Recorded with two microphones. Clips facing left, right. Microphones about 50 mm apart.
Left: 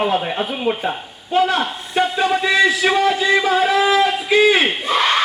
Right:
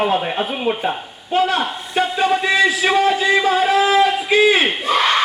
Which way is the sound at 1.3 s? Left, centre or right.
Centre.